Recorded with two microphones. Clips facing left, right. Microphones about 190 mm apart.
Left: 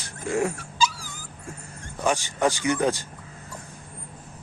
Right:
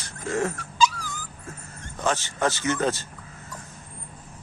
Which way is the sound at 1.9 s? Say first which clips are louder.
Left 1 dB; 15° left (ahead or behind).